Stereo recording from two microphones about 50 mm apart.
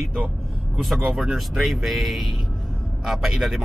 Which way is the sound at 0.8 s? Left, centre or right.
Centre.